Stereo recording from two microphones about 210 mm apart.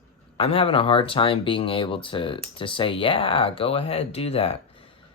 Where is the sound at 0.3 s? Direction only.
25° left (ahead or behind).